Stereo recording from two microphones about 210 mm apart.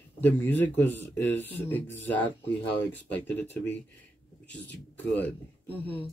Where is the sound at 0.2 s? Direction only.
10° left (ahead or behind).